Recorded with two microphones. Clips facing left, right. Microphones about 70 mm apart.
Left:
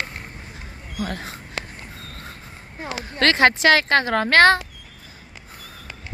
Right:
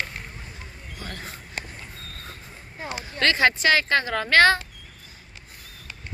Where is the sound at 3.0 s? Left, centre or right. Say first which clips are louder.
Left 4 dB; left.